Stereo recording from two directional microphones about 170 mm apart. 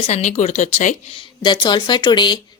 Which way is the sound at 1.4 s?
25° left (ahead or behind).